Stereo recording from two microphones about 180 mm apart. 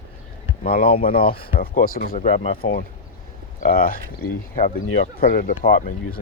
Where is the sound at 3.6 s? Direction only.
50° left (ahead or behind).